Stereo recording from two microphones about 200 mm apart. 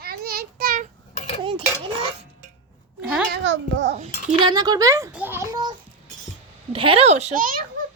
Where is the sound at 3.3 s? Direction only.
65° right (ahead or behind).